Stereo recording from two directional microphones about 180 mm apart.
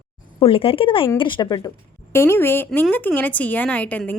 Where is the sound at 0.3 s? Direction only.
30° left (ahead or behind).